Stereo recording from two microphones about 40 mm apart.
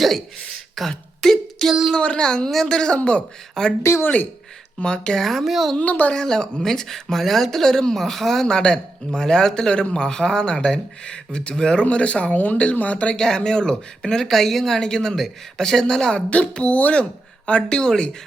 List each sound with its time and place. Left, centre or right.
0.9 s a sound: centre
1.9 s speech: left
3.0 s speech: left
3.6 s speech: centre
4.8 s speech: left
5.2 s a woman's voice: centre
5.8 s speech: left
6.2 s speech: centre
11.8 s speech: left
13.1 s speech: centre
16.3 s speech: left